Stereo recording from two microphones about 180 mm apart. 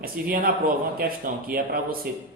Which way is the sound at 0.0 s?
55° right (ahead or behind).